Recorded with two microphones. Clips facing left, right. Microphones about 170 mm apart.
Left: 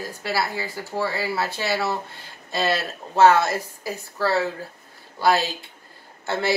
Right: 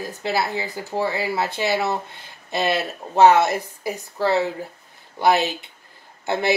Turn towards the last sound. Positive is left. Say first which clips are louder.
# right 2 dB
turn(degrees=-20)  # may be behind; listen again after turning